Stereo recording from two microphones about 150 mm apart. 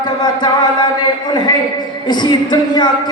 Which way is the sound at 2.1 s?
30° left (ahead or behind).